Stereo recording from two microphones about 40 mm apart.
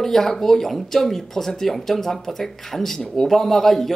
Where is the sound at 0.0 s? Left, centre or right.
Centre.